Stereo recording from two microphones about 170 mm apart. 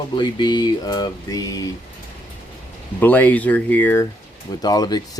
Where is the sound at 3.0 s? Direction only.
10° left (ahead or behind).